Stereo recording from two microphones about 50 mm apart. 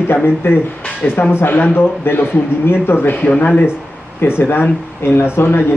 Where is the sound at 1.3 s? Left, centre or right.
Left.